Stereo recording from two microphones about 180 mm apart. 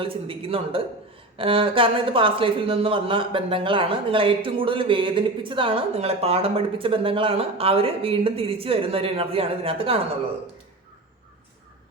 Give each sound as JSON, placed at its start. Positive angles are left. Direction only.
{"t": 0.0, "sound": "a man's voice", "side_deg": -30}